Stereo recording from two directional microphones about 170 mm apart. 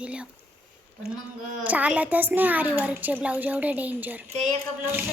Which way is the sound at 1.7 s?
10° right (ahead or behind).